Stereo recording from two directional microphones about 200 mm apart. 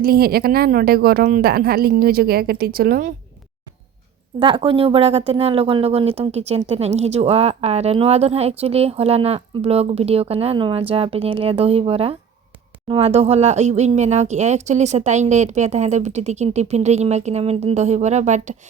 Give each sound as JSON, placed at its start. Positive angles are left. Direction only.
{"t": 0.0, "sound": "a woman's voice", "side_deg": -50}
{"t": 4.4, "sound": "speech", "side_deg": -25}